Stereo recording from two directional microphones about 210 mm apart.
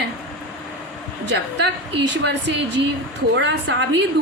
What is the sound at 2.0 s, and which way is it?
A woman's voice, 55° right (ahead or behind).